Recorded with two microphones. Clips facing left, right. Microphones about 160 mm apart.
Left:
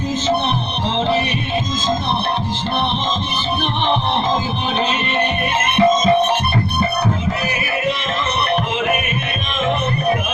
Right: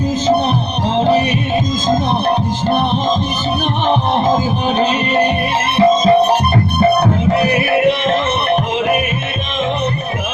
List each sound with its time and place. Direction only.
0.9 s music: 40° right (ahead or behind)
4.8 s music: 40° right (ahead or behind)
6.9 s music: 65° right (ahead or behind)